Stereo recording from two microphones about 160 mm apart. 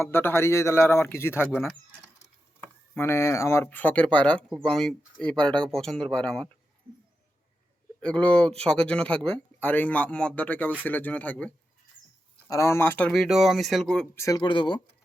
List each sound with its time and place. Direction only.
0.0 s speech: 15° left (ahead or behind)
1.5 s speech: centre (ahead or behind)
2.9 s speech: 15° left (ahead or behind)
8.0 s speech: 5° left (ahead or behind)
13.2 s speech: centre (ahead or behind)
14.2 s speech: 25° left (ahead or behind)